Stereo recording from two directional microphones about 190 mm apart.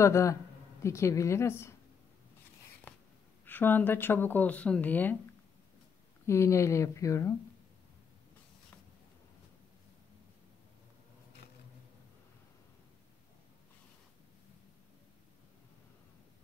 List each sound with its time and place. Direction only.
0.0 s speech: 15° left (ahead or behind)
3.4 s speech: 10° left (ahead or behind)
6.2 s speech: 15° left (ahead or behind)